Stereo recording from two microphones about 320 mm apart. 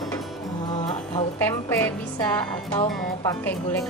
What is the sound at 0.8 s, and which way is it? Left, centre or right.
Music, centre.